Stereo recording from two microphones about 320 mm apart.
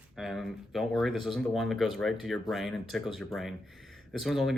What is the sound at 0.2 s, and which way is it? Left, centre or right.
Speech, centre.